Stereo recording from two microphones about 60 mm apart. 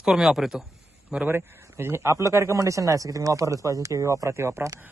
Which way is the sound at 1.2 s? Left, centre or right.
Right.